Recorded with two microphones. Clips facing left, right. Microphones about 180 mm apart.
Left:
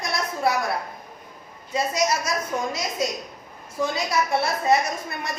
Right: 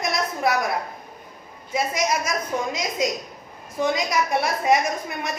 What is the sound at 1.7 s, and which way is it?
A woman's voice, 15° right (ahead or behind).